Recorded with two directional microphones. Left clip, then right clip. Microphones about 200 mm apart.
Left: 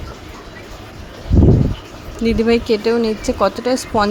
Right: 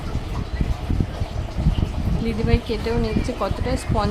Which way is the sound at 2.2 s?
30° left (ahead or behind).